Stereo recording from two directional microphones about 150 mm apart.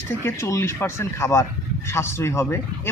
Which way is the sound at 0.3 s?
20° left (ahead or behind).